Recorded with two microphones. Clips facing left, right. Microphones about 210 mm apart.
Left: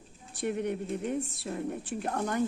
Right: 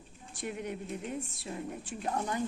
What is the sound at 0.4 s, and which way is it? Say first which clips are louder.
Speech: left 6 dB; 60° left (ahead or behind).